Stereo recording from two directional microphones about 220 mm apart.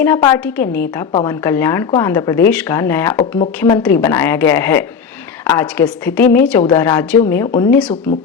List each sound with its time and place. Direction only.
0.0 s speech: 15° left (ahead or behind)
3.2 s speech: 30° left (ahead or behind)
3.8 s speech: 10° left (ahead or behind)
7.4 s speech: 20° left (ahead or behind)
7.7 s speech: 5° left (ahead or behind)